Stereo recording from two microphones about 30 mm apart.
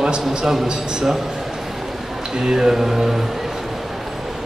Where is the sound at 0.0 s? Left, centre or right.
Right.